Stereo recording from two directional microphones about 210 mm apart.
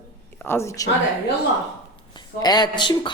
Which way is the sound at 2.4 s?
20° left (ahead or behind).